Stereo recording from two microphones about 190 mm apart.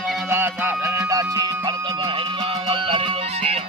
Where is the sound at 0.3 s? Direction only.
10° right (ahead or behind).